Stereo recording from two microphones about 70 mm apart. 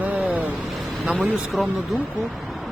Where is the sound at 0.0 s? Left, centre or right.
Right.